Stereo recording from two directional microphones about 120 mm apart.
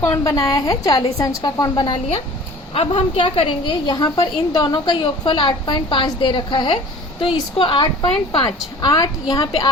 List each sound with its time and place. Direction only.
0.0 s a woman's voice: 25° left (ahead or behind); by 9.0 s 45° left (ahead or behind)
9.3 s a woman's voice: 30° left (ahead or behind)